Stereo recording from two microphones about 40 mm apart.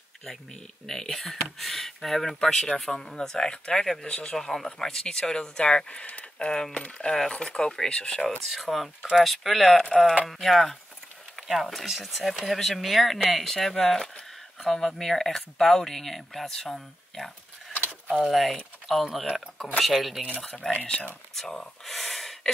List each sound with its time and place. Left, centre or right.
0.8 s speech: centre
2.4 s speech: centre
8.5 s speech: centre
20.8 s speech: left
21.4 s speech: centre